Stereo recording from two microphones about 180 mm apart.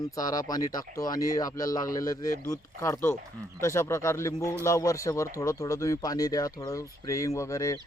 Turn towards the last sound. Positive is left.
turn(degrees=15)  # may be behind; listen again after turning